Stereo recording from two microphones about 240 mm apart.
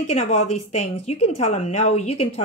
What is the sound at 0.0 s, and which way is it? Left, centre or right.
Speech, left.